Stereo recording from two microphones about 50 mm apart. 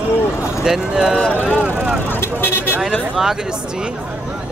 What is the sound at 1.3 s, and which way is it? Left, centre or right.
Speech, left.